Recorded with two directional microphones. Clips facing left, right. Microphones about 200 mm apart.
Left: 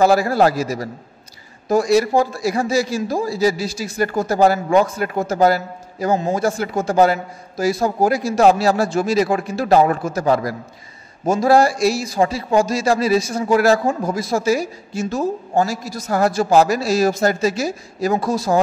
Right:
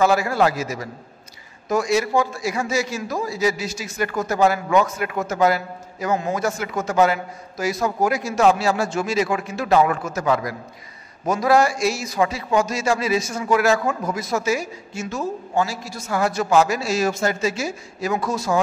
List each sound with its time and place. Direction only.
0.0 s a man's voice: 35° left (ahead or behind)